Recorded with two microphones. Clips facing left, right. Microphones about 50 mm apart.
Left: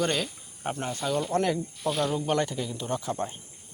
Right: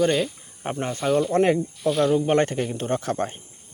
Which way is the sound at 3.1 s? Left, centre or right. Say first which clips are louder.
Right 5 dB; right.